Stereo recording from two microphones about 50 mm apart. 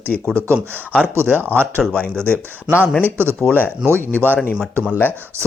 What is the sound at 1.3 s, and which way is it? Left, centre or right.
Speech, right.